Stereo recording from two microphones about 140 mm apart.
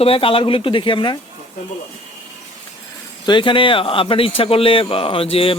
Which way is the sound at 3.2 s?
35° left (ahead or behind).